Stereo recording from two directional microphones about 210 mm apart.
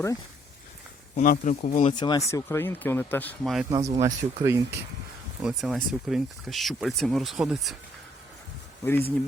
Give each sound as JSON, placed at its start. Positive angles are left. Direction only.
{"t": 1.1, "sound": "speech", "side_deg": 40}
{"t": 1.9, "sound": "speech", "side_deg": 20}
{"t": 3.7, "sound": "speech", "side_deg": -15}
{"t": 5.4, "sound": "speech", "side_deg": 0}
{"t": 8.8, "sound": "speech", "side_deg": 10}